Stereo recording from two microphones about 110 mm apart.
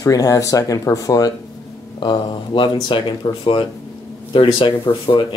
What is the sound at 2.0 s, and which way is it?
Speech, 45° left (ahead or behind).